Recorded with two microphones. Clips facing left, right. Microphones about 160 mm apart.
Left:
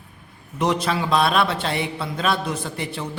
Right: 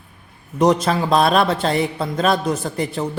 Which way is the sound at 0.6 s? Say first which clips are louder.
Right 6 dB; 40° right (ahead or behind).